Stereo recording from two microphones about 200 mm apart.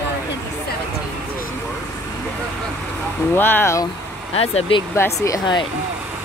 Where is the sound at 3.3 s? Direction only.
10° left (ahead or behind).